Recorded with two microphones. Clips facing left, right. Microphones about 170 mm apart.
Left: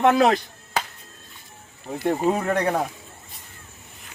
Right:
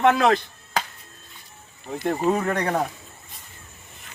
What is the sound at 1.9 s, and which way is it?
Speech, 15° left (ahead or behind).